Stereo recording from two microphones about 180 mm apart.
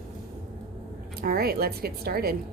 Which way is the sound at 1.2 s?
55° right (ahead or behind).